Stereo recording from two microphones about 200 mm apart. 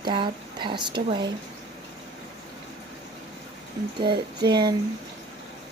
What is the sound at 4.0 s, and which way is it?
Speech, 20° right (ahead or behind).